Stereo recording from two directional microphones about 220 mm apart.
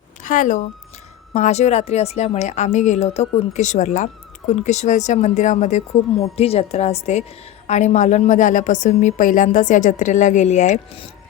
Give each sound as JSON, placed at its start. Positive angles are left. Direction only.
{"t": 0.2, "sound": "a woman's voice", "side_deg": 35}